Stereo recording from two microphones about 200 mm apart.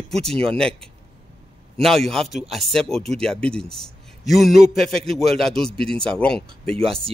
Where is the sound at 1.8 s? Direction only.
Centre (ahead or behind).